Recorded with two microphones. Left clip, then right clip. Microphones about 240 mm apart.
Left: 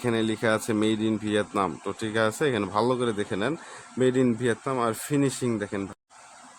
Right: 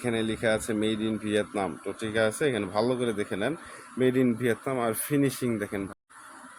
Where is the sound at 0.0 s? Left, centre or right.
Centre.